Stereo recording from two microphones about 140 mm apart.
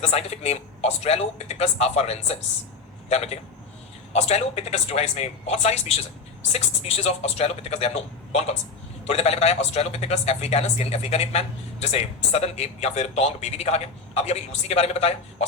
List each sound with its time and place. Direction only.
0.0 s speech: 50° left (ahead or behind)